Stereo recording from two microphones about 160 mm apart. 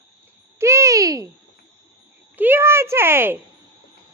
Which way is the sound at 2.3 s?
10° right (ahead or behind).